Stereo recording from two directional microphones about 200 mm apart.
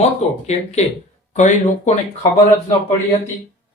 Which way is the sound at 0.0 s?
35° left (ahead or behind).